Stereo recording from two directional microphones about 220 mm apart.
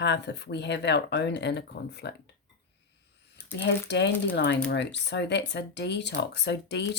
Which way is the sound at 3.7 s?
50° left (ahead or behind).